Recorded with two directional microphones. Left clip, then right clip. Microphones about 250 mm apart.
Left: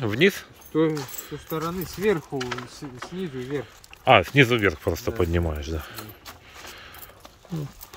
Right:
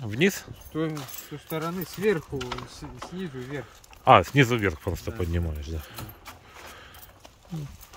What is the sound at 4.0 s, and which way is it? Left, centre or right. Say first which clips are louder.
Speech: left 1 dB; centre.